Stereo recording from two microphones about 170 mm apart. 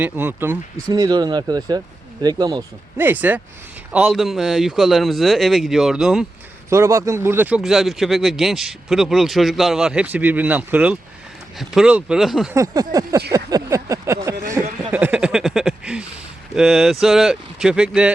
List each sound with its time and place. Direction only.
0.0 s speech: 10° right (ahead or behind)
0.9 s speech: 25° right (ahead or behind)
3.0 s speech: 10° right (ahead or behind)
6.7 s speech: 15° right (ahead or behind)
12.5 s speech: 20° right (ahead or behind)
13.3 s a sound: 20° right (ahead or behind)
16.6 s speech: 5° right (ahead or behind)